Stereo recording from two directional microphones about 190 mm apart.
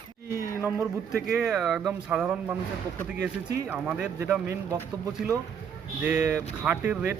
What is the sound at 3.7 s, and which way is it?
Speech, 5° right (ahead or behind).